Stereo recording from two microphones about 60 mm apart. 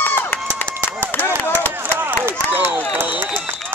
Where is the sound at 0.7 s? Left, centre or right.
Centre.